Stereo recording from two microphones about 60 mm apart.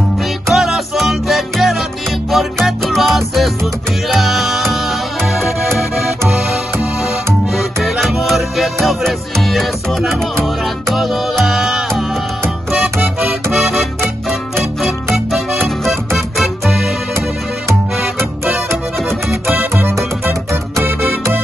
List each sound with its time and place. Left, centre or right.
0.5 s music: centre
13.2 s music: centre
16.3 s music: centre
19.4 s music: right
19.7 s music: right